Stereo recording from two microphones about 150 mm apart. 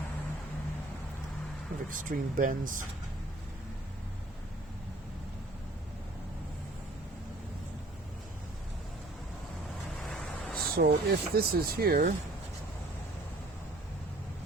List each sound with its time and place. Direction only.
1.9 s speech: 65° right (ahead or behind)
10.1 s a sound: 5° left (ahead or behind)
10.8 s speech: 90° right; by 12.1 s 75° right (ahead or behind)